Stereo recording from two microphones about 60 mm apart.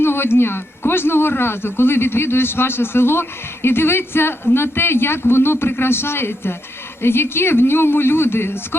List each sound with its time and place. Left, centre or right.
0.0 s a man's voice: left